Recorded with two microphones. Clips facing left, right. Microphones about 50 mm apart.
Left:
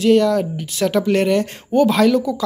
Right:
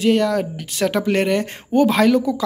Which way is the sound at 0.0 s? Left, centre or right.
Right.